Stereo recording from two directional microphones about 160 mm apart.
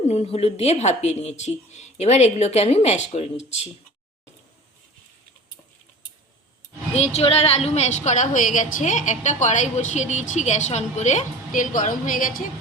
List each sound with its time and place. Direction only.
0.0 s a woman's voice: 45° left (ahead or behind)
6.9 s a woman's voice: 45° left (ahead or behind)